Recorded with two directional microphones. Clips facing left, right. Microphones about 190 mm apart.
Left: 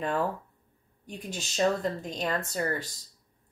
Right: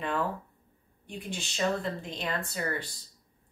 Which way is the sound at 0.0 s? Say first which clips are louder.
Left 2 dB; 40° left (ahead or behind).